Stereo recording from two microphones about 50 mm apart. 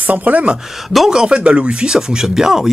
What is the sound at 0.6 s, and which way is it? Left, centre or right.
Speech, centre.